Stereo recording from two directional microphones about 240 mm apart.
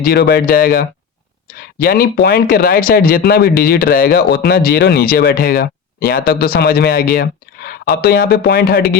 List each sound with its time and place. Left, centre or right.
0.0 s speech: left